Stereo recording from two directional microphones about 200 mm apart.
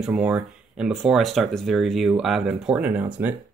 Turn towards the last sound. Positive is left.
turn(degrees=-10)  # may be behind; listen again after turning